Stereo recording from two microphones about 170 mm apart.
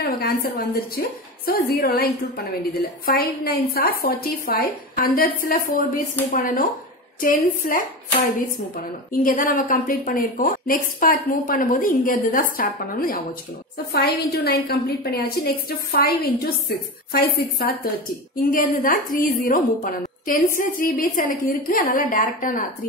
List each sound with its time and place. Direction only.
0.0 s a woman's voice: 65° left (ahead or behind)
13.9 s a woman's voice: 70° left (ahead or behind); by 22.7 s 50° left (ahead or behind)